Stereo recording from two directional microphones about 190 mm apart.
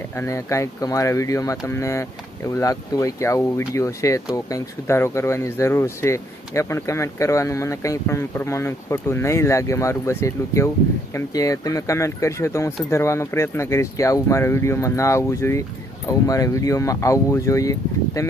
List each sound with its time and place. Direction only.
0.2 s speech: 15° left (ahead or behind)